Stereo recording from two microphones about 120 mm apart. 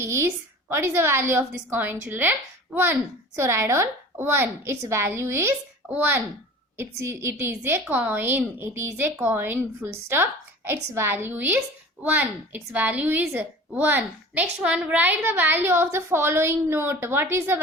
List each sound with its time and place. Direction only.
0.0 s a woman's voice: 25° right (ahead or behind)